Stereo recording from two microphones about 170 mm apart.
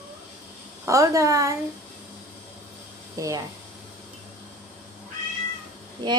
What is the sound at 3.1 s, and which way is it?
Speech, 20° right (ahead or behind).